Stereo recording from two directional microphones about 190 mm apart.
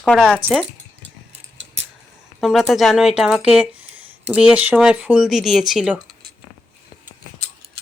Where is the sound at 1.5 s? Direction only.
75° right (ahead or behind).